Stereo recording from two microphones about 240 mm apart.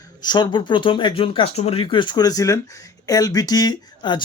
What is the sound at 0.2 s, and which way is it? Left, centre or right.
Speech, centre.